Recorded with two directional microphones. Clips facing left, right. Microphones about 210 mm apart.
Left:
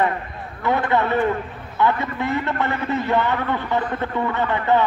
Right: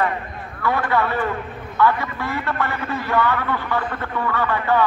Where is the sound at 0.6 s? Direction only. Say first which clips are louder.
Left 1 dB; 20° left (ahead or behind).